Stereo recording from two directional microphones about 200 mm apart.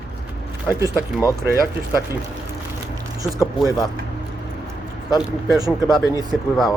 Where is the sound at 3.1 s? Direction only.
15° right (ahead or behind).